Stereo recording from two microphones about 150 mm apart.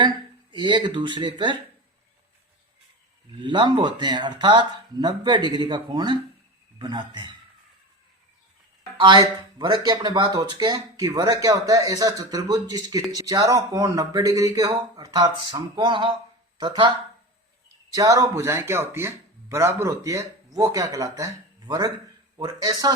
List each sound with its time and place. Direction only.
0.5 s speech: 30° right (ahead or behind)
3.4 s a man's voice: 30° right (ahead or behind)
9.0 s speech: 30° right (ahead or behind)
17.9 s speech: 20° right (ahead or behind)